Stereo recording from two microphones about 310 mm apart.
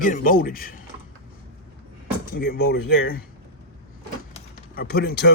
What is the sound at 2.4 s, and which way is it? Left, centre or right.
Speech, left.